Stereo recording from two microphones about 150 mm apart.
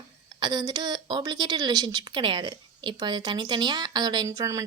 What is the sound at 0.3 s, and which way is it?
A woman's voice, 30° right (ahead or behind).